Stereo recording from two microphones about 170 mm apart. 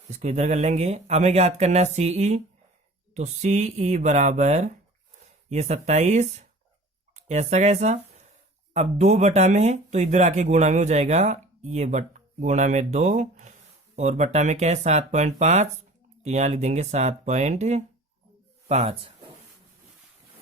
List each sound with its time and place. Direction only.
0.2 s speech: 40° right (ahead or behind)